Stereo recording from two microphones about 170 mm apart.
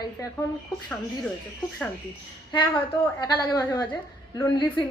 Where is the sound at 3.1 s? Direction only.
20° left (ahead or behind).